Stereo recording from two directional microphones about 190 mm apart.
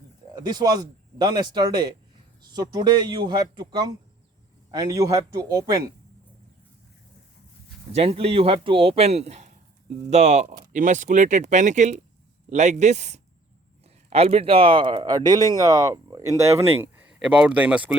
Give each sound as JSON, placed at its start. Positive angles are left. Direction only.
{"t": 0.3, "sound": "speech", "side_deg": -20}
{"t": 7.9, "sound": "speech", "side_deg": -30}